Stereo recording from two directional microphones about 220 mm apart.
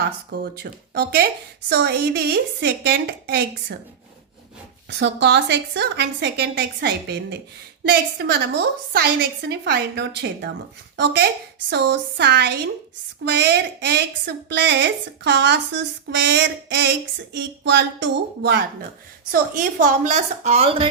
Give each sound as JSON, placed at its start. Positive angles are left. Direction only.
{"t": 0.3, "sound": "a woman's voice", "side_deg": -45}
{"t": 4.9, "sound": "a woman's voice", "side_deg": -50}
{"t": 19.3, "sound": "a woman's voice", "side_deg": -35}